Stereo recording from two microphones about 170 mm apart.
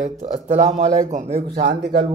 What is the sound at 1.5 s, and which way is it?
Speech, 80° right.